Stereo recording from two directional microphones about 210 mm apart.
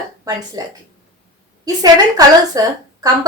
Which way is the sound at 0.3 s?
20° right (ahead or behind).